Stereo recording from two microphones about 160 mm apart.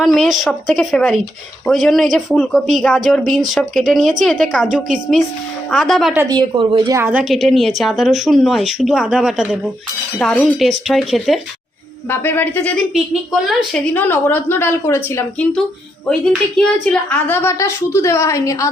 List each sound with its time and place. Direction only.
0.0 s a woman's voice: centre (ahead or behind)
6.1 s speech: 25° right (ahead or behind)
7.0 s a woman's voice: 10° right (ahead or behind)
12.0 s a woman's voice: 15° left (ahead or behind)
16.6 s a woman's voice: 5° left (ahead or behind)